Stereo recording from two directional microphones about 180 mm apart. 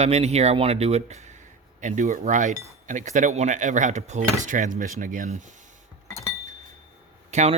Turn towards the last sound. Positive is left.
turn(degrees=-40)  # may be behind; listen again after turning